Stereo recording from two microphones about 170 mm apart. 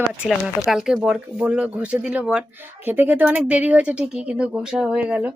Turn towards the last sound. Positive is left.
turn(degrees=-10)  # may be behind; listen again after turning